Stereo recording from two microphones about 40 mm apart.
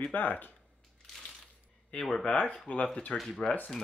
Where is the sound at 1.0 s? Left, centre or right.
Centre.